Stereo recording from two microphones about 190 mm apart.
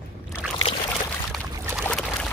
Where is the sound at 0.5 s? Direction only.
25° left (ahead or behind).